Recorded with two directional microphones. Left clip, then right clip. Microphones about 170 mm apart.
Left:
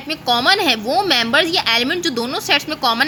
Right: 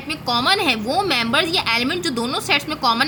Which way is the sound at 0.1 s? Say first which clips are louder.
Left 3 dB; 35° left (ahead or behind).